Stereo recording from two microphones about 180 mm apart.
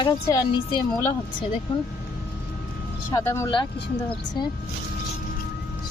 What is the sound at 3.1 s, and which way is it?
Speech, 15° left (ahead or behind).